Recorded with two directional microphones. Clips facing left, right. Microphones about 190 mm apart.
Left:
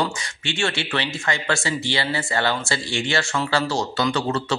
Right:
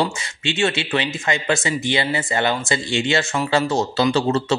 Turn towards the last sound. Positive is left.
turn(degrees=-25)  # may be behind; listen again after turning